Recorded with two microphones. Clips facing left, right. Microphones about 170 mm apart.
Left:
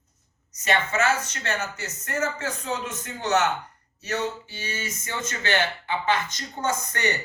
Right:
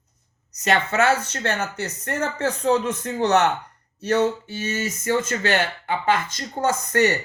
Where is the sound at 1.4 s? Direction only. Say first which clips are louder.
Right 5 dB; 60° right (ahead or behind).